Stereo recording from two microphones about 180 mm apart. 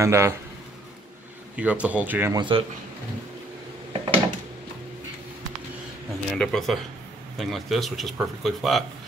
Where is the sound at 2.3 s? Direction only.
25° right (ahead or behind).